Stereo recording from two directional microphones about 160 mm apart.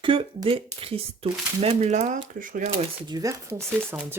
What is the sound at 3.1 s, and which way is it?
Speech, 20° right (ahead or behind).